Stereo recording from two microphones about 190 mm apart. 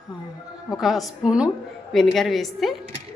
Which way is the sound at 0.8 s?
Centre (ahead or behind).